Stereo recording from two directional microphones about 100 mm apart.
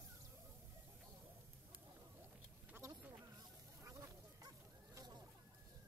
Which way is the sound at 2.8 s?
35° right (ahead or behind).